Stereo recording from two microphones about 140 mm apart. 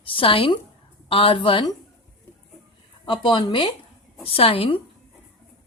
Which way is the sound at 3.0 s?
35° left (ahead or behind).